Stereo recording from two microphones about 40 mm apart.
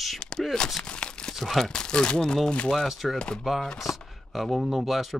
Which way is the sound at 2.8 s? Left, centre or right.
Centre.